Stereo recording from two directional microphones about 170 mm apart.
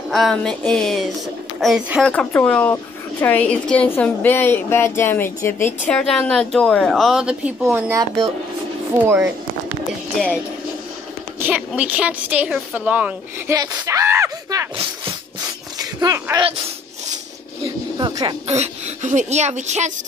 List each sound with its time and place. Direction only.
0.1 s a woman's voice: centre (ahead or behind)
2.0 s a woman's voice: 10° left (ahead or behind)
7.9 s speech: 20° right (ahead or behind)
11.3 s a woman's voice: 10° right (ahead or behind)
13.6 s speech: 20° right (ahead or behind)
15.8 s speech: 20° right (ahead or behind)
17.9 s speech: 25° right (ahead or behind)
18.5 s speech: 45° right (ahead or behind)